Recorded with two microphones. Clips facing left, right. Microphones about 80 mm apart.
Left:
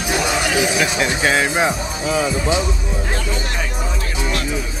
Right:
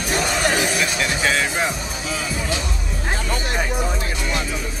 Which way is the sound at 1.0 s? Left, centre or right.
Centre.